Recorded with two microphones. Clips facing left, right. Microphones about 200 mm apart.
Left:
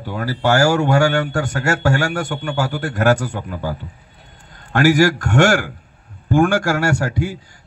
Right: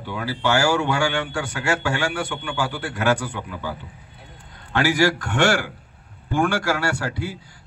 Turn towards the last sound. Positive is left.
turn(degrees=45)  # may be behind; listen again after turning